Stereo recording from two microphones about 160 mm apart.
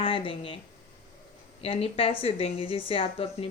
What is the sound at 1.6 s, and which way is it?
A woman's voice, 35° left (ahead or behind).